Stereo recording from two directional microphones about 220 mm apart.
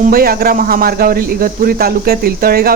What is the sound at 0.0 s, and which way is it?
Speech, 40° right (ahead or behind).